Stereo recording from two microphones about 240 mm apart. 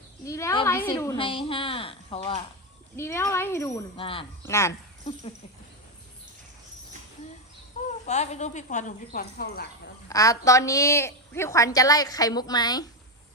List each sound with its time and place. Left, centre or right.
0.3 s a woman's voice: centre
2.9 s a woman's voice: centre
3.9 s a woman's voice: left
4.4 s a woman's voice: centre
8.0 s speech: left
10.1 s a woman's voice: centre